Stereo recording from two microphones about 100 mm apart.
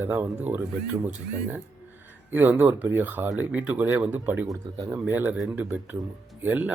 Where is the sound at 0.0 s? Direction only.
20° right (ahead or behind).